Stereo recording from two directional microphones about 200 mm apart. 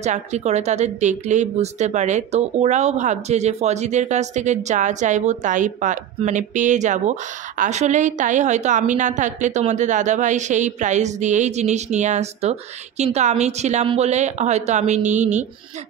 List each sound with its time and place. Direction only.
0.0 s speech: 35° right (ahead or behind)